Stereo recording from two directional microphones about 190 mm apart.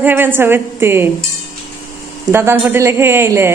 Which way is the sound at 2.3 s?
10° right (ahead or behind).